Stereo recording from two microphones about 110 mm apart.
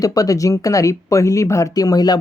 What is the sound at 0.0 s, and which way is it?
Speech, 35° left (ahead or behind).